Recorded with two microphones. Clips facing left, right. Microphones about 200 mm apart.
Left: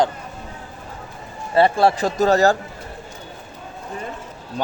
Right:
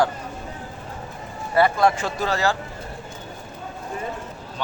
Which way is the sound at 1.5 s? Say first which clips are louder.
Left 3 dB; 30° left (ahead or behind).